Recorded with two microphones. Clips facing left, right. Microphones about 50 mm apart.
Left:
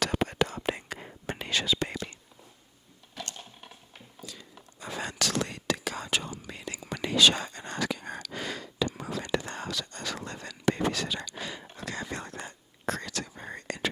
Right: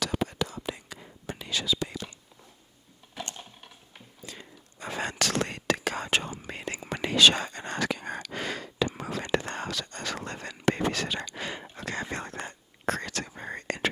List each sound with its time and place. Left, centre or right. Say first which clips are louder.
0.0 s whispering: left 2 dB; left
3.2 s typing: right 2 dB; right
4.2 s a sound: right 1 dB; right
4.8 s whispering: right 2 dB; right
8.2 s a sound: right 2 dB; right
9.0 s whispering: right 2 dB; right